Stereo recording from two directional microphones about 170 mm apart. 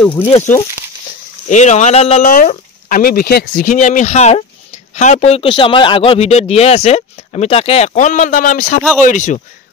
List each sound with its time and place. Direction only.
0.3 s a man's voice: 40° left (ahead or behind)
2.2 s a man's voice: 55° left (ahead or behind)